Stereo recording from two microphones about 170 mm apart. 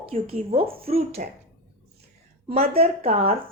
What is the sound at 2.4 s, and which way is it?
Speech, 35° right (ahead or behind).